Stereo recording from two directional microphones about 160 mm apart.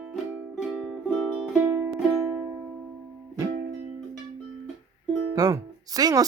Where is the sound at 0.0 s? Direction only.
5° right (ahead or behind).